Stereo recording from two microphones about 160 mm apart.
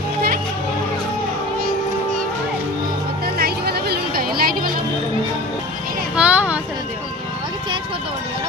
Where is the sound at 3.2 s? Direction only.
80° right.